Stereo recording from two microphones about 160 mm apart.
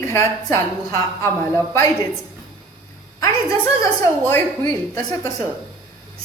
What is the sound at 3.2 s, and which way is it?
A woman's voice, 20° left (ahead or behind).